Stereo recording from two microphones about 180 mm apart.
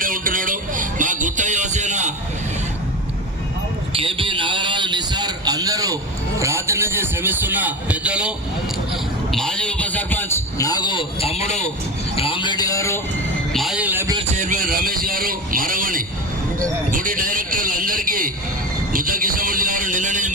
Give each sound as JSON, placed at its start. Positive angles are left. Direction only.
{"t": 0.0, "sound": "music", "side_deg": -50}
{"t": 3.9, "sound": "a sound", "side_deg": -30}
{"t": 6.4, "sound": "a man's voice", "side_deg": -15}
{"t": 9.3, "sound": "a man's voice", "side_deg": 5}
{"t": 12.1, "sound": "music", "side_deg": 30}
{"t": 13.5, "sound": "a man's voice", "side_deg": 0}
{"t": 14.3, "sound": "speech", "side_deg": -45}